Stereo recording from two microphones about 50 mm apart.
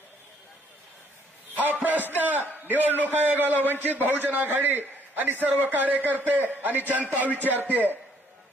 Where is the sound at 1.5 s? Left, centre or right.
Right.